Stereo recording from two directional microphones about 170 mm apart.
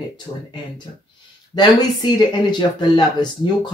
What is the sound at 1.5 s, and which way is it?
Speech, 25° left (ahead or behind).